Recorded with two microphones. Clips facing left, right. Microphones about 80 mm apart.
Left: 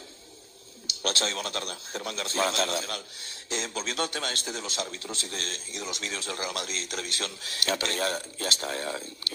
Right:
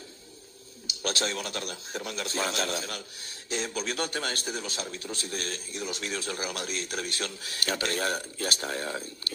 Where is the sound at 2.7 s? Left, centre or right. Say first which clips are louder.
Left 2 dB; right.